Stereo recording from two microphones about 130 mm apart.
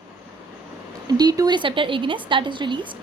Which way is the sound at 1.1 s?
30° right (ahead or behind).